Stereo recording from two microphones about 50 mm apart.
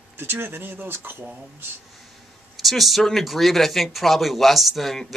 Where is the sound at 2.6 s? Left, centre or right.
Centre.